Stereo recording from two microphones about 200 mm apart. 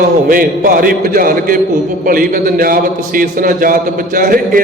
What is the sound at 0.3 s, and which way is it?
A man's voice, 45° right (ahead or behind).